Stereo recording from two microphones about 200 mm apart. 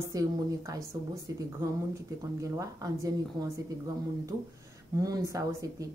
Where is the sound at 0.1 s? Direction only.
15° right (ahead or behind).